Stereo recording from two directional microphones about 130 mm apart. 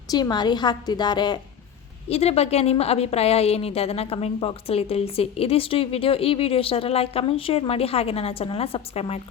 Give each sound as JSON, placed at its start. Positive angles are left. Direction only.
{"t": 0.1, "sound": "a woman's voice", "side_deg": 30}
{"t": 2.0, "sound": "a woman's voice", "side_deg": 50}